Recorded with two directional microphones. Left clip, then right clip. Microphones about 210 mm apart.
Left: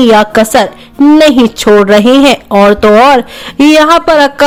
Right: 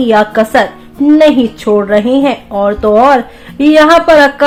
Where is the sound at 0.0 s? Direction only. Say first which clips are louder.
Left 3 dB; 30° left (ahead or behind).